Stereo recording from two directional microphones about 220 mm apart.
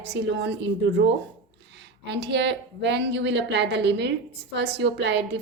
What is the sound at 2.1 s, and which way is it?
A woman's voice, 50° right (ahead or behind).